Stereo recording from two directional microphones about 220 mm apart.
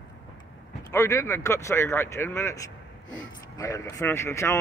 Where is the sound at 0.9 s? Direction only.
15° left (ahead or behind).